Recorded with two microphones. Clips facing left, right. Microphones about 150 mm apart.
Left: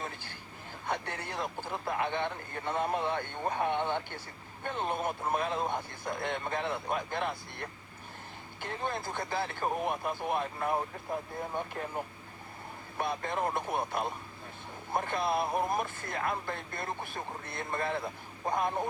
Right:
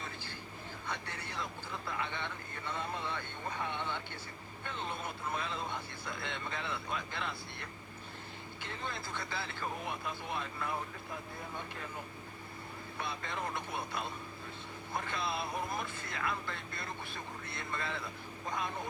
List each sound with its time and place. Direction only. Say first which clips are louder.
0.9 s speech: left 8 dB; 55° left (ahead or behind)